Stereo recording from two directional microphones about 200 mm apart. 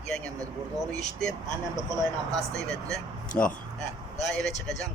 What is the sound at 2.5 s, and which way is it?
Speech, 15° right (ahead or behind).